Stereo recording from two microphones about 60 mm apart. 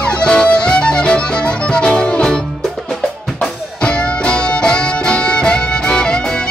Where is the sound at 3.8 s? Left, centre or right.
Centre.